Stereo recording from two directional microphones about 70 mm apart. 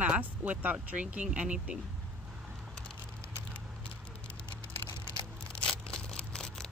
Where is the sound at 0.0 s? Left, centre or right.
Right.